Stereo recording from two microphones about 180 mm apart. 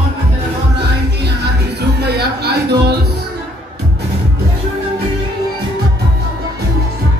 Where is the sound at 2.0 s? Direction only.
65° right (ahead or behind).